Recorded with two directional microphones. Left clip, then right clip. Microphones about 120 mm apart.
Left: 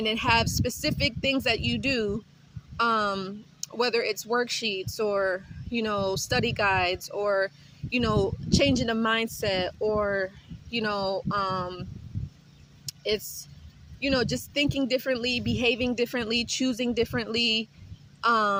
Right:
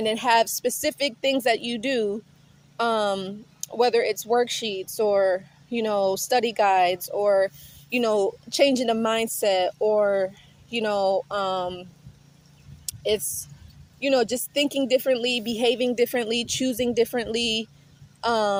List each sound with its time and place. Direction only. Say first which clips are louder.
0.0 s a woman's voice: right 4 dB; 35° left (ahead or behind)
12.8 s a sound: right 4 dB; 30° left (ahead or behind)
14.0 s a woman's voice: right 5 dB; 35° left (ahead or behind)